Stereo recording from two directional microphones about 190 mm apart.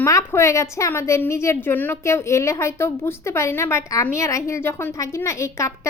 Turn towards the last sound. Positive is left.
turn(degrees=15)  # may be behind; listen again after turning